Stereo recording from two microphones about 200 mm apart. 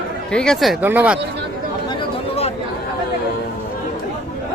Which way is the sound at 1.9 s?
30° left (ahead or behind).